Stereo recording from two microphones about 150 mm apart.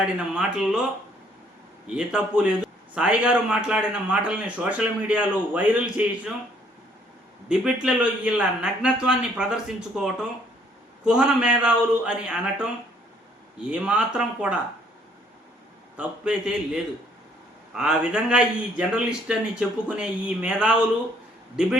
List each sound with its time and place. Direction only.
0.0 s a man's voice: 5° right (ahead or behind)
2.0 s speech: 5° right (ahead or behind)
7.4 s a man's voice: 5° right (ahead or behind)
16.0 s a man's voice: 5° right (ahead or behind)